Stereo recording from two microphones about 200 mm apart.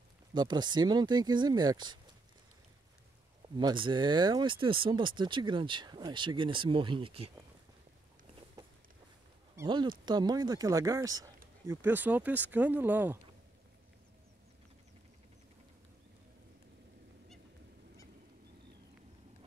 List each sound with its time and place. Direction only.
0.3 s speech: 20° right (ahead or behind)
3.4 s speech: 20° right (ahead or behind)
9.6 s speech: 20° right (ahead or behind)